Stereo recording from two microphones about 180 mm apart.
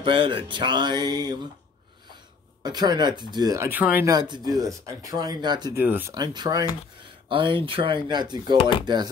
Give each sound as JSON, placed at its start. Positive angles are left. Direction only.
{"t": 0.0, "sound": "speech", "side_deg": -30}
{"t": 2.6, "sound": "speech", "side_deg": -20}
{"t": 4.1, "sound": "speech", "side_deg": -25}
{"t": 5.8, "sound": "speech", "side_deg": -10}
{"t": 6.1, "sound": "speech", "side_deg": -25}
{"t": 8.5, "sound": "speech", "side_deg": 30}
{"t": 8.8, "sound": "speech", "side_deg": -25}